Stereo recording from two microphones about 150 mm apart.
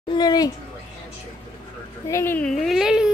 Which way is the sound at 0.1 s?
25° left (ahead or behind).